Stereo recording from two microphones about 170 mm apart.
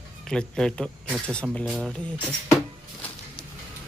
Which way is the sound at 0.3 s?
5° left (ahead or behind).